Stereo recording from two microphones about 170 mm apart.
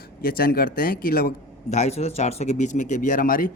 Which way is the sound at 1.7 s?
40° left (ahead or behind).